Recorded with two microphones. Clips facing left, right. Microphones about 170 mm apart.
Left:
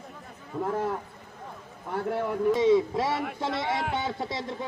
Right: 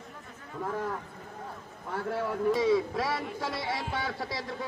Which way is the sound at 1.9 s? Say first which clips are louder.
Left 3 dB; 25° left (ahead or behind).